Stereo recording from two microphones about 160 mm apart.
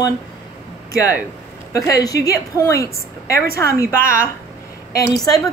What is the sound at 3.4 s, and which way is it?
Speech, 70° right (ahead or behind).